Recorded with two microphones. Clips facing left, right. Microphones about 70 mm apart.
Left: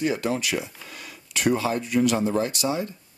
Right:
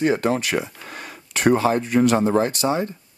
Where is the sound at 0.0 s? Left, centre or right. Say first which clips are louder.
Right 5 dB; right.